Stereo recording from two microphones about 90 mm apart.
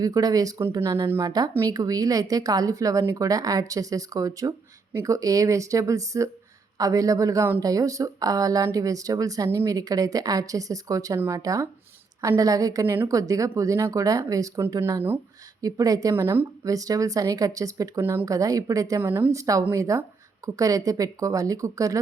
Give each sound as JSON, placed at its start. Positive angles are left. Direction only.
{"t": 0.0, "sound": "speech", "side_deg": -45}
{"t": 0.8, "sound": "speech", "side_deg": -30}
{"t": 1.6, "sound": "speech", "side_deg": -40}
{"t": 12.8, "sound": "speech", "side_deg": -30}
{"t": 15.6, "sound": "speech", "side_deg": -40}
{"t": 18.0, "sound": "speech", "side_deg": -25}
{"t": 18.3, "sound": "speech", "side_deg": -40}
{"t": 18.9, "sound": "speech", "side_deg": -25}